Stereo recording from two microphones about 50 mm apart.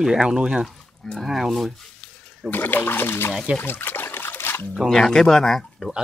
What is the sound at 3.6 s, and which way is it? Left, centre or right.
Trickle, left.